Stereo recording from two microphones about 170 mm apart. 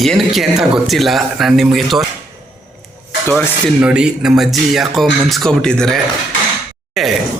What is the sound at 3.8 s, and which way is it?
Speech, 5° right (ahead or behind).